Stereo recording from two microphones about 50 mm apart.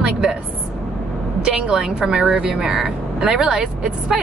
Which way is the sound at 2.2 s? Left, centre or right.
Right.